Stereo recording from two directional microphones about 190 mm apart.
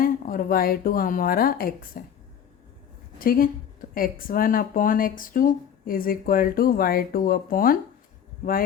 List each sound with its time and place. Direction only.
0.0 s speech: 45° left (ahead or behind)
3.2 s speech: 50° left (ahead or behind)